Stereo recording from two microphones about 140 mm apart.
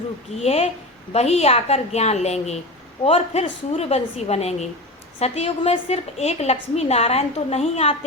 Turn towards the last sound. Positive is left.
turn(degrees=45)  # may be behind; listen again after turning